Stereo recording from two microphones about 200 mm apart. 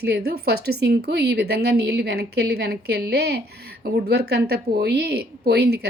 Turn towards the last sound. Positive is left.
turn(degrees=-55)  # may be behind; listen again after turning